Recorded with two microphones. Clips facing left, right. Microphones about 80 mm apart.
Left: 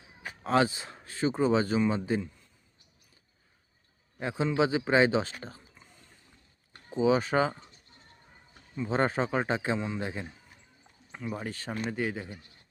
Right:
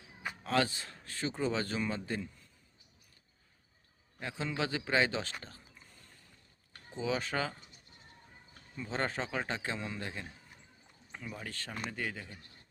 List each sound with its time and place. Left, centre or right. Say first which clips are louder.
0.4 s a man's voice: left 6 dB; left
4.2 s a man's voice: left 9 dB; left
7.0 s a man's voice: left 9 dB; left
9.2 s a man's voice: left 8 dB; left
9.5 s a man's voice: left 8 dB; left
11.3 s a man's voice: left 8 dB; left